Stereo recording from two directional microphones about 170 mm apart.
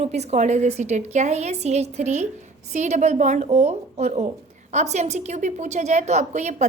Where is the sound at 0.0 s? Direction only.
40° right (ahead or behind).